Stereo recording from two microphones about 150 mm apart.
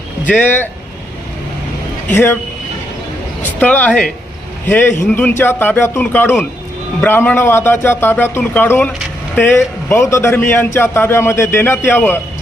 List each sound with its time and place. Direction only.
0.3 s a man's voice: 10° left (ahead or behind)
2.1 s a man's voice: 15° left (ahead or behind)
3.6 s a man's voice: 10° left (ahead or behind)